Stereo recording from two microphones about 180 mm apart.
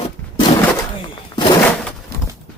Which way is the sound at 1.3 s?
25° left (ahead or behind).